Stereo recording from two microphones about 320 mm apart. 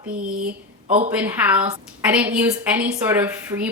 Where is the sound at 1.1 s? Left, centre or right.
Centre.